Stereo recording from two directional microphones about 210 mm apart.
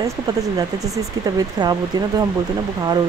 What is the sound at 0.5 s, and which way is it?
Speech, 15° right (ahead or behind).